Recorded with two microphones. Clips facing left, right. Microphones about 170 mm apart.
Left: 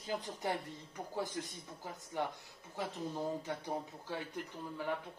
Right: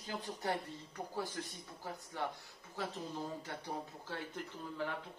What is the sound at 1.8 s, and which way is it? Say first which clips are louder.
Speech: left 2 dB; 15° left (ahead or behind).